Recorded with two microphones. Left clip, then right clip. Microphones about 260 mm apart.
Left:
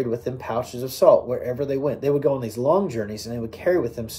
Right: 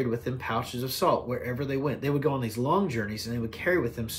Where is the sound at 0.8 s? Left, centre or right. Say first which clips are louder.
Left 10 dB; right.